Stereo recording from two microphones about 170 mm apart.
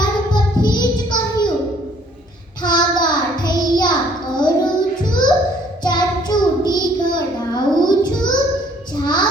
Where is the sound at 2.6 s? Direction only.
25° left (ahead or behind).